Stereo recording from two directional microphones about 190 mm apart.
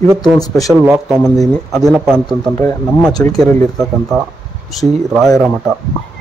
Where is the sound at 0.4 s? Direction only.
20° left (ahead or behind).